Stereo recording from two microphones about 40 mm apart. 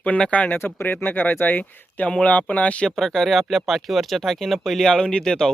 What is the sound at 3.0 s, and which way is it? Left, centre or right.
Speech, centre.